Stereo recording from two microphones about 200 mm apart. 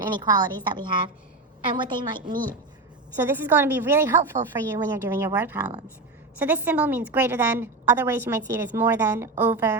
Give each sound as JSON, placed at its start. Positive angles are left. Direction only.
{"t": 0.0, "sound": "a woman's voice", "side_deg": -20}
{"t": 2.2, "sound": "a woman's voice", "side_deg": -45}
{"t": 3.2, "sound": "a woman's voice", "side_deg": -10}